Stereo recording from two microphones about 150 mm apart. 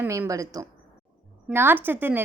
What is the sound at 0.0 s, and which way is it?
A woman's voice, 20° right (ahead or behind).